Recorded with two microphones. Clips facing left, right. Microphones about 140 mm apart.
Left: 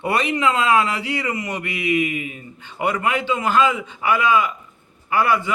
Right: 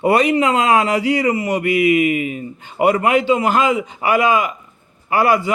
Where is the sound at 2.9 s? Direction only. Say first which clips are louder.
Right 7 dB; 35° right (ahead or behind).